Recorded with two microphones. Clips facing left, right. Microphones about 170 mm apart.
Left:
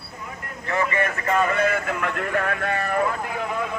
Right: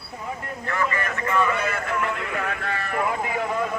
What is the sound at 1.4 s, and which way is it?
Speech, 50° left (ahead or behind).